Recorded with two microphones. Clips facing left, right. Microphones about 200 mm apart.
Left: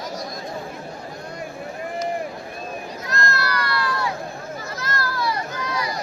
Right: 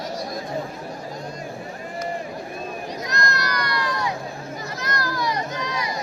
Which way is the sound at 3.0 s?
20° right (ahead or behind).